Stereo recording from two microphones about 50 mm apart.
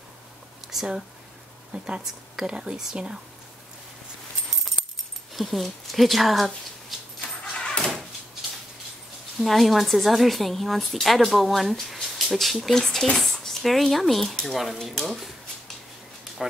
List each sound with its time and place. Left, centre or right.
1.7 s speech: centre
5.3 s a woman's voice: centre
7.2 s a sound: centre
9.4 s a woman's voice: centre
16.4 s speech: centre